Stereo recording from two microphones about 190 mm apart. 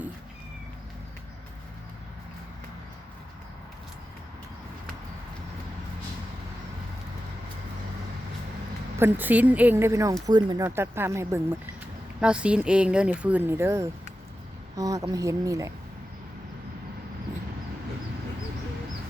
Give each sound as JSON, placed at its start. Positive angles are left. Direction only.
{"t": 9.0, "sound": "speech", "side_deg": -10}